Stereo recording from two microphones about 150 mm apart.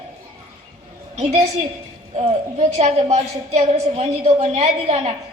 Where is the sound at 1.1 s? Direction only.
45° right (ahead or behind).